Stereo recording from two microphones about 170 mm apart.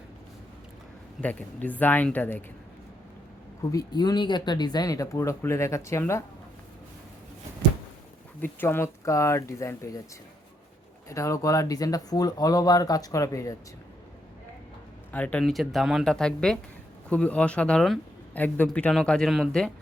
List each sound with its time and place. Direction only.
1.2 s speech: 10° left (ahead or behind)
3.7 s speech: 20° left (ahead or behind)
8.4 s speech: 15° left (ahead or behind)
11.1 s speech: 20° left (ahead or behind)
15.1 s speech: 10° left (ahead or behind)